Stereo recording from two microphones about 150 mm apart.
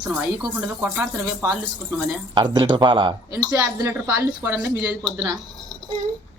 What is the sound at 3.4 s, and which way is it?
Speech, 15° right (ahead or behind).